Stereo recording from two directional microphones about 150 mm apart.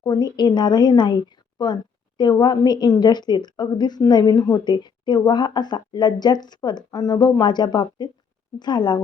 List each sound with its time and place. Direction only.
0.0 s speech: 25° left (ahead or behind)